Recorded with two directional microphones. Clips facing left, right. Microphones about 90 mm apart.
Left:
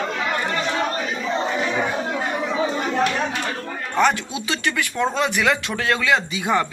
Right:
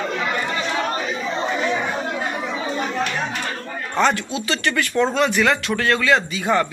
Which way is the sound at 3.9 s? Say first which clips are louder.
Even; 15° left (ahead or behind).